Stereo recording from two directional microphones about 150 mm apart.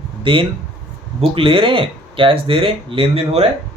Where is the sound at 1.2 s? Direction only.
35° right (ahead or behind).